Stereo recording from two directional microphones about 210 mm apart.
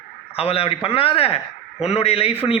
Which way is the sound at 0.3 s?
30° left (ahead or behind).